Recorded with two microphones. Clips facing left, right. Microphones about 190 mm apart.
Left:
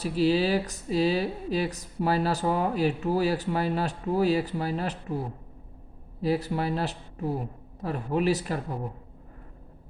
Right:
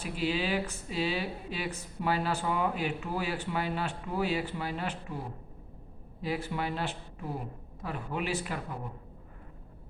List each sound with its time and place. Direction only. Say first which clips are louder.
0.0 s a woman's voice: left 8 dB; 40° left (ahead or behind)
6.2 s a woman's voice: left 6 dB; 40° left (ahead or behind)